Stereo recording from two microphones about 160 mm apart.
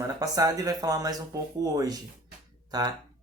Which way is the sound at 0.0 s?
20° right (ahead or behind).